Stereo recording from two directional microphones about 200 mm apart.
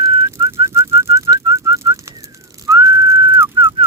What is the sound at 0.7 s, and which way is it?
Whistling, 15° right (ahead or behind).